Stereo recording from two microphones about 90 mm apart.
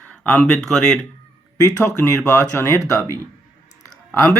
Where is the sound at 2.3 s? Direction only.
30° left (ahead or behind).